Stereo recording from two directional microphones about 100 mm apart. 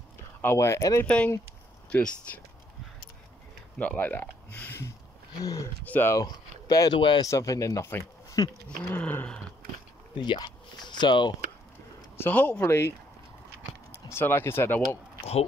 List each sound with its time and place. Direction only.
0.4 s speech: 25° left (ahead or behind)
1.0 s speech: 10° left (ahead or behind)
3.7 s speech: 15° left (ahead or behind)
5.4 s speech: 35° left (ahead or behind)
5.9 s speech: 20° left (ahead or behind)
6.1 s speech: 35° left (ahead or behind)
7.0 s speech: 55° left (ahead or behind)
7.2 s speech: 35° left (ahead or behind)
8.6 s speech: 15° left (ahead or behind)
10.1 s speech: 50° left (ahead or behind)
12.2 s speech: 20° left (ahead or behind)
13.9 s speech: 25° left (ahead or behind)